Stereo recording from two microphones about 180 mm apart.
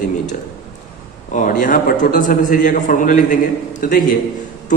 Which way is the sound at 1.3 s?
45° left (ahead or behind).